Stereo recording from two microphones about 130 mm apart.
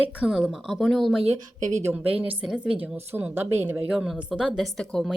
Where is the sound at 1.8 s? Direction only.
15° right (ahead or behind).